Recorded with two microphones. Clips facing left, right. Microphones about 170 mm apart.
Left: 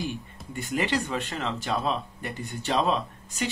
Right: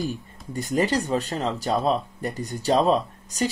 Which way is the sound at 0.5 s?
40° right (ahead or behind).